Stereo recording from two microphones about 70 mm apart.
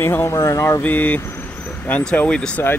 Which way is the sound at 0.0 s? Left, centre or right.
Left.